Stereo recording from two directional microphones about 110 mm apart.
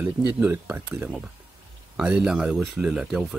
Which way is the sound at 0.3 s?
15° right (ahead or behind).